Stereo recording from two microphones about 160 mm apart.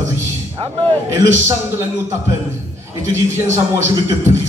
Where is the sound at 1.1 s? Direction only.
20° right (ahead or behind).